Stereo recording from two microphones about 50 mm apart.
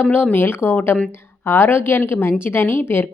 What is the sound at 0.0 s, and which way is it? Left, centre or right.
Speech, left.